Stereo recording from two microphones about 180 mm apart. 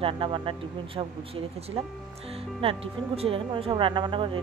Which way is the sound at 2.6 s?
30° right (ahead or behind).